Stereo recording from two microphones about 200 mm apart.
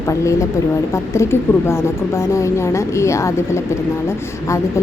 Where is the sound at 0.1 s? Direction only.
15° left (ahead or behind).